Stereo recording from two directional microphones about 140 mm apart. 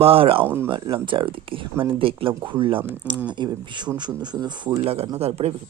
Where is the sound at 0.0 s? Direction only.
40° right (ahead or behind).